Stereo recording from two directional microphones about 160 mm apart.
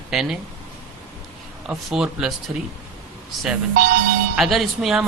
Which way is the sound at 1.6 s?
5° right (ahead or behind).